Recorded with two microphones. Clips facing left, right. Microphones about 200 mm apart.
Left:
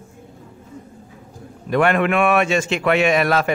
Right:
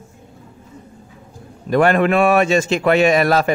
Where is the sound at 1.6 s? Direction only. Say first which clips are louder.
Right 3 dB; 40° right (ahead or behind).